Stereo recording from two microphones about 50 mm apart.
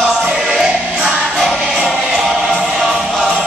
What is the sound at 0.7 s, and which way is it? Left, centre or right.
Music, centre.